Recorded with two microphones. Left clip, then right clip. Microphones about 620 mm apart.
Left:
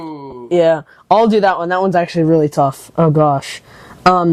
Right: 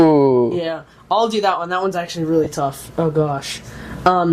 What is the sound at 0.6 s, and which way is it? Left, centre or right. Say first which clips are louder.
Speech: left 11 dB; left.